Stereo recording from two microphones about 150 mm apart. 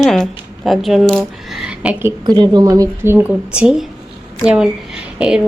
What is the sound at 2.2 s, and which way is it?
A woman's voice, 30° right (ahead or behind).